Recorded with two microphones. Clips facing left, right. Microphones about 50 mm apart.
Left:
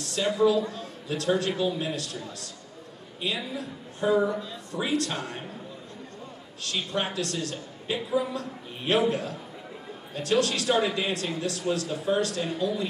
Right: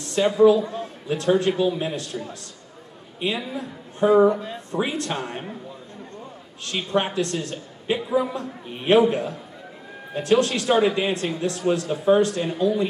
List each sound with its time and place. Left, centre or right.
0.0 s a man's voice: right
6.6 s a man's voice: right
10.4 s a man's voice: right